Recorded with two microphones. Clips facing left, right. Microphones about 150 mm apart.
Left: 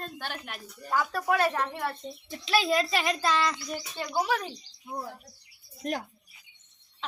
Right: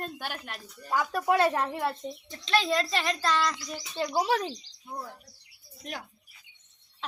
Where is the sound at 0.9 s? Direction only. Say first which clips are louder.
Right 1 dB; 15° right (ahead or behind).